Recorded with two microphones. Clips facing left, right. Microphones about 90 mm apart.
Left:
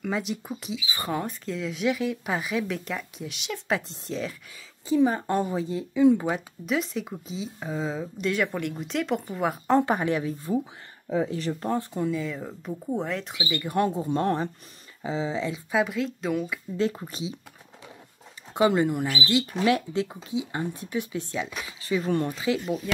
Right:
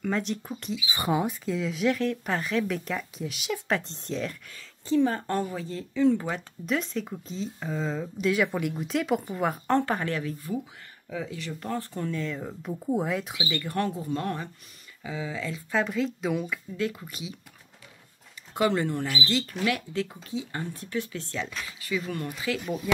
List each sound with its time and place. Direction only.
0.0 s a woman's voice: 5° left (ahead or behind)
0.8 s speech: 15° right (ahead or behind)
1.5 s a woman's voice: centre (ahead or behind)
4.8 s speech: 15° left (ahead or behind)
6.6 s a woman's voice: centre (ahead or behind)
9.8 s speech: 15° left (ahead or behind)
11.1 s speech: 35° left (ahead or behind)
12.0 s a woman's voice: 5° left (ahead or behind)
13.5 s speech: 15° left (ahead or behind)
15.7 s a woman's voice: 5° left (ahead or behind)
16.9 s speech: 30° left (ahead or behind)
18.5 s speech: 20° left (ahead or behind)
21.8 s speech: 30° left (ahead or behind)